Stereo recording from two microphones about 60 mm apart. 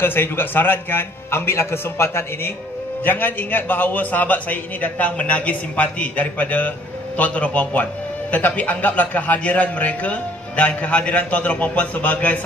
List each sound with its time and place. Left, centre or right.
0.0 s a man's voice: left
3.0 s speech: left